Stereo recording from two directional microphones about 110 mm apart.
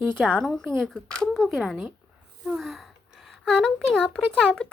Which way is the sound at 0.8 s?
5° left (ahead or behind).